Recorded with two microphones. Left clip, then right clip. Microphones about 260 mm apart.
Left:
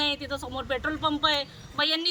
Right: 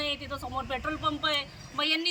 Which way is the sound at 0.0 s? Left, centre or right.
Centre.